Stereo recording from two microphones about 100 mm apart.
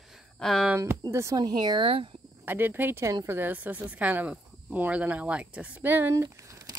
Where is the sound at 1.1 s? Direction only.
30° right (ahead or behind).